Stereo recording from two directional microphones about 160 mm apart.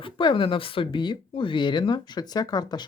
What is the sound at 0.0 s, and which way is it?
Speech, 30° left (ahead or behind).